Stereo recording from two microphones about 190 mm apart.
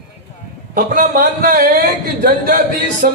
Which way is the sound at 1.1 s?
50° right (ahead or behind).